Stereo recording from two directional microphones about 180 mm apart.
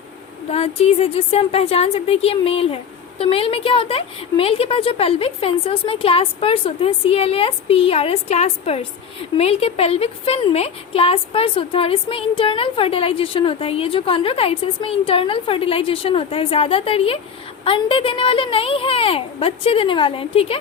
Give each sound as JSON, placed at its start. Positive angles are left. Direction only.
{"t": 0.5, "sound": "a woman's voice", "side_deg": 35}